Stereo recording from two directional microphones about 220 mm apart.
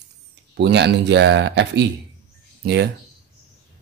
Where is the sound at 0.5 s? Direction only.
50° right (ahead or behind).